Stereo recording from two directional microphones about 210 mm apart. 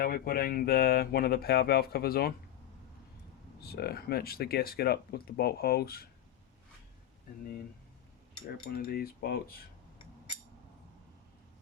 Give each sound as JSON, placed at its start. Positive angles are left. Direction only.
{"t": 0.0, "sound": "speech", "side_deg": 45}
{"t": 3.6, "sound": "speech", "side_deg": 50}
{"t": 8.7, "sound": "speech", "side_deg": 45}